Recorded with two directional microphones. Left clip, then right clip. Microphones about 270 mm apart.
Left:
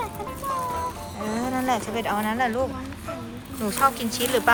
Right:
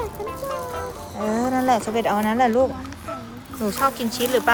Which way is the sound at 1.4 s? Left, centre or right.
Centre.